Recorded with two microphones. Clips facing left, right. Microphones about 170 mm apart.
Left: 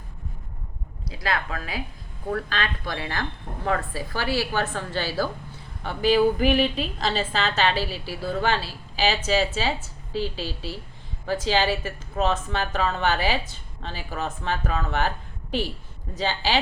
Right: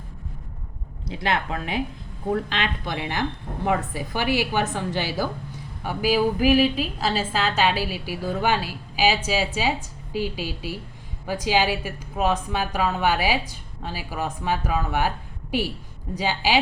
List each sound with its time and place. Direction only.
1.0 s a woman's voice: 25° right (ahead or behind)
16.1 s a woman's voice: 10° right (ahead or behind)